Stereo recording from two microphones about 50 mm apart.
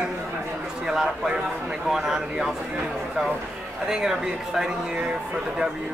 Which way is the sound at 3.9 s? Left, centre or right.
Centre.